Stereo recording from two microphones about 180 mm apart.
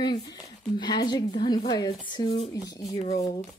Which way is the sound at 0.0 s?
25° left (ahead or behind).